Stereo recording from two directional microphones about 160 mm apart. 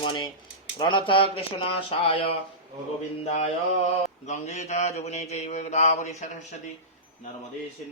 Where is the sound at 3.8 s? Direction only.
45° left (ahead or behind).